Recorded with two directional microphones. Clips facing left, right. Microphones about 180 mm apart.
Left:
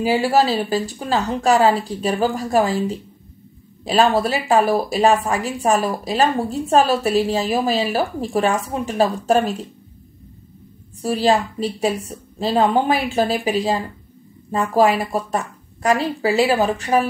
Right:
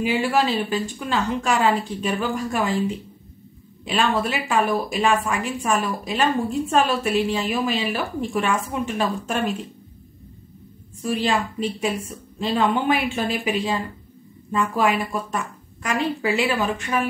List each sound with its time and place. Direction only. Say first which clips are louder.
0.0 s speech: left 4 dB; 35° left (ahead or behind)
11.0 s speech: left 5 dB; 35° left (ahead or behind)